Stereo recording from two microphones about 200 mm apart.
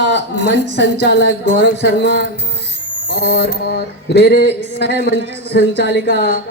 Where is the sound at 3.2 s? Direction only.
55° left (ahead or behind).